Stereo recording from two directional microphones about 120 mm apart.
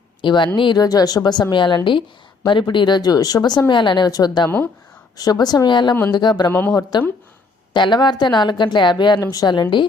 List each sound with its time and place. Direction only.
0.2 s a woman's voice: 40° left (ahead or behind)
4.4 s speech: 20° left (ahead or behind)
5.1 s a woman's voice: 35° left (ahead or behind)
6.5 s speech: 15° left (ahead or behind)
7.7 s a woman's voice: 40° left (ahead or behind)